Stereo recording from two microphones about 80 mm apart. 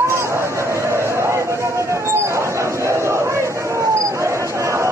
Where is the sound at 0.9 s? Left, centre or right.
Right.